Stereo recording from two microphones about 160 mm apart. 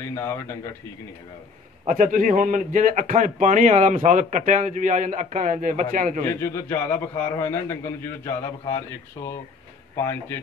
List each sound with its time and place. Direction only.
0.1 s a man's voice: 15° left (ahead or behind)
1.9 s a man's voice: 55° right (ahead or behind)
6.2 s a man's voice: 20° left (ahead or behind)